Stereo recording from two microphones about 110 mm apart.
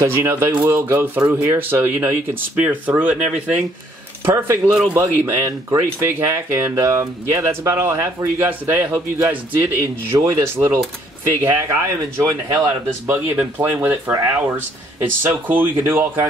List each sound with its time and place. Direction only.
0.0 s speech: 20° right (ahead or behind)
10.1 s speech: 25° right (ahead or behind)